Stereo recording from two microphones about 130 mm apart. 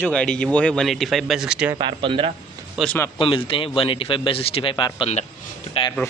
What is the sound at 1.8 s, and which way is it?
Speech, 40° right (ahead or behind).